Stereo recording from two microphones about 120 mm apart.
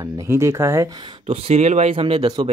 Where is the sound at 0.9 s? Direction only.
40° right (ahead or behind).